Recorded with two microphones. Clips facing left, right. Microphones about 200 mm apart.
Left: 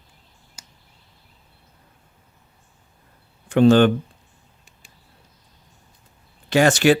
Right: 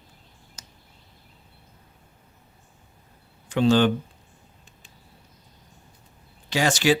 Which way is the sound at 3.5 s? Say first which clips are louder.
Left 6 dB; 60° left (ahead or behind).